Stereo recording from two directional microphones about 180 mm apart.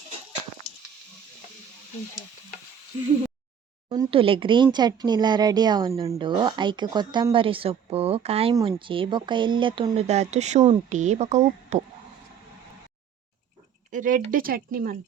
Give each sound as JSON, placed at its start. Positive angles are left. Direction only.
{"t": 3.8, "sound": "speech", "side_deg": -25}
{"t": 13.9, "sound": "speech", "side_deg": -45}